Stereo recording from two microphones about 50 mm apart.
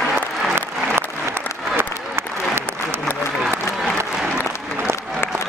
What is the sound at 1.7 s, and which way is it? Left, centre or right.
Applause, right.